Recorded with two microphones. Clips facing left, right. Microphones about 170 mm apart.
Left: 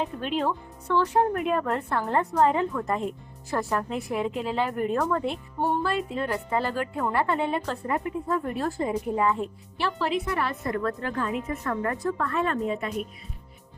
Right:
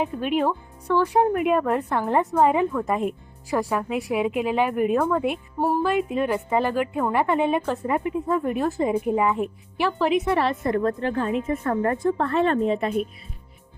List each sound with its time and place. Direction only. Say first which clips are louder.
0.0 s speech: right 4 dB; 10° right (ahead or behind)
5.8 s speech: right 5 dB; 15° right (ahead or behind)